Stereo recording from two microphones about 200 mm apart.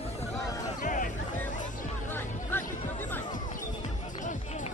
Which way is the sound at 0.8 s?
40° left (ahead or behind).